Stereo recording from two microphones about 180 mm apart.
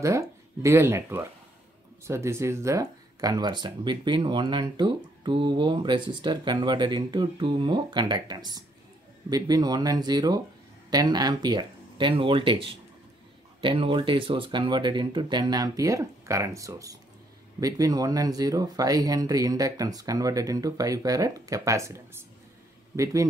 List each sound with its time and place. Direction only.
0.0 s speech: 15° right (ahead or behind)